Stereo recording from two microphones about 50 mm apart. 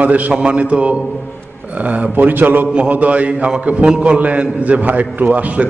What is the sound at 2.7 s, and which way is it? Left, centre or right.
A man's voice, right.